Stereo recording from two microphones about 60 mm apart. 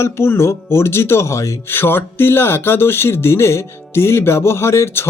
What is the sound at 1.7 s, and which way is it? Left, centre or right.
Speech, left.